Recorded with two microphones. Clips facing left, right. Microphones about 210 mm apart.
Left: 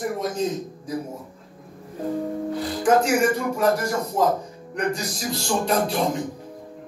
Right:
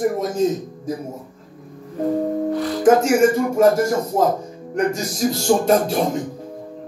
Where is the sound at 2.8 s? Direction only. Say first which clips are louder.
Right 5 dB; 45° right (ahead or behind).